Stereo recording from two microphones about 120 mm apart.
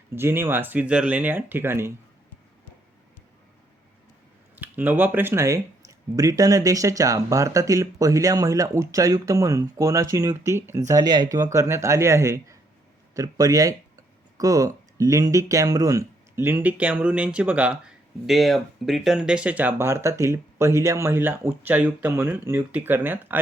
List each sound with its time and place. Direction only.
0.1 s speech: 20° right (ahead or behind)
4.5 s speech: 15° right (ahead or behind)